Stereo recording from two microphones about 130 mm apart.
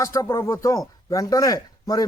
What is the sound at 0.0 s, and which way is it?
A man's voice, 25° left (ahead or behind).